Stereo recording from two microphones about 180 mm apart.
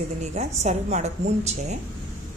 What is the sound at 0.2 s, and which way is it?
A woman's voice, 40° right (ahead or behind).